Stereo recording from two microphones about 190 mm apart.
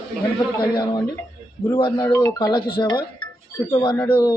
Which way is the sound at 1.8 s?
25° left (ahead or behind).